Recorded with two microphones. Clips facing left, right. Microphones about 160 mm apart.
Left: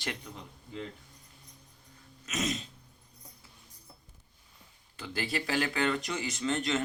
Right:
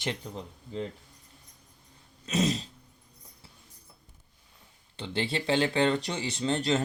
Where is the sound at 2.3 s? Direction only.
30° right (ahead or behind).